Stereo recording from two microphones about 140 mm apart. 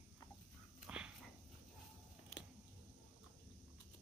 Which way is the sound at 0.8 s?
10° right (ahead or behind).